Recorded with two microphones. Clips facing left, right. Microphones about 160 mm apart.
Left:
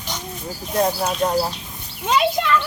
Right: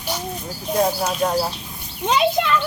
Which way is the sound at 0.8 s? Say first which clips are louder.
Even; 5° right (ahead or behind).